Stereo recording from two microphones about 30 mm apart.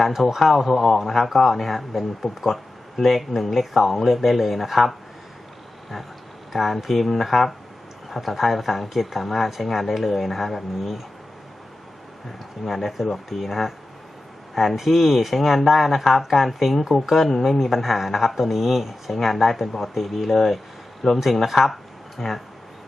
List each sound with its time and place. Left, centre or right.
0.0 s speech: centre
6.5 s speech: centre
12.6 s speech: centre